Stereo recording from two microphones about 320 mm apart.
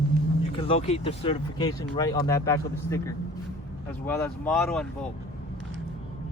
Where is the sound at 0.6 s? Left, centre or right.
Centre.